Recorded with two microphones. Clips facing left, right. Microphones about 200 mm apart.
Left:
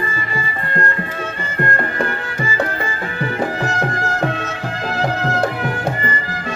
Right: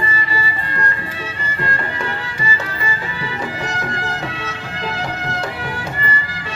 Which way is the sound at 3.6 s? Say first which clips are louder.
Left 4 dB; 45° left (ahead or behind).